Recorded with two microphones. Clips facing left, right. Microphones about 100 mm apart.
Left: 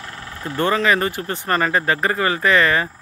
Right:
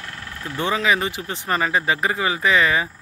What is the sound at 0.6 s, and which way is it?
Speech, 5° right (ahead or behind).